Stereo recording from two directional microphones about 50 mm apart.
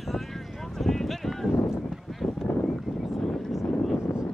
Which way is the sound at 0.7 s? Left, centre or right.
Centre.